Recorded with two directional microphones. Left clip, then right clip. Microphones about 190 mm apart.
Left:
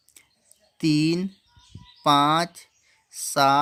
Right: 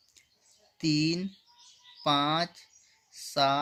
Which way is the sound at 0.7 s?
35° left (ahead or behind).